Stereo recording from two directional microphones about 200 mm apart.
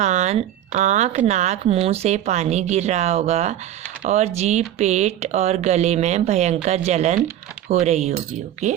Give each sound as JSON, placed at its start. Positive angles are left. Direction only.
{"t": 0.0, "sound": "speech", "side_deg": -35}